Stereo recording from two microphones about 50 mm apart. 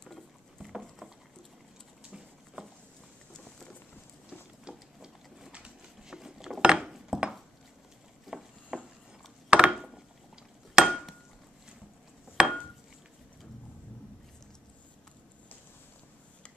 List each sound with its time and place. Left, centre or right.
2.0 s patter: centre
3.3 s a sound: centre
4.3 s a sound: centre
9.5 s wood: right
10.7 s hammer: centre
12.4 s dishes: centre